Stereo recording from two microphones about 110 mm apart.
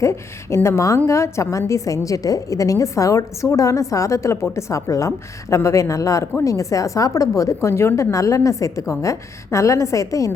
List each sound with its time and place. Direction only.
0.0 s a woman's voice: 25° left (ahead or behind)